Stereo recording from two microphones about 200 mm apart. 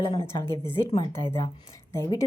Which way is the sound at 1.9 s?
15° left (ahead or behind).